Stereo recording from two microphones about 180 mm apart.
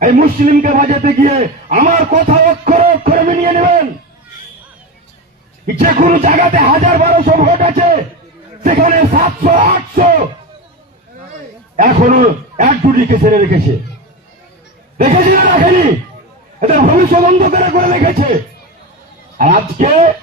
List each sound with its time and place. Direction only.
0.0 s a man's voice: 50° right (ahead or behind)
3.6 s a sound: 50° right (ahead or behind)
5.6 s speech: 50° right (ahead or behind)
11.8 s speech: 50° right (ahead or behind)
14.9 s speech: 50° right (ahead or behind)
19.4 s speech: 45° right (ahead or behind)